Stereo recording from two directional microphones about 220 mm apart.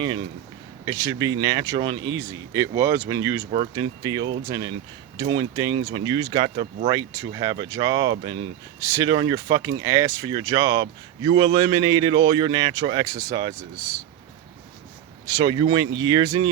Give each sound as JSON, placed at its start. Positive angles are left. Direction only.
{"t": 0.0, "sound": "speech", "side_deg": -20}
{"t": 15.3, "sound": "speech", "side_deg": -20}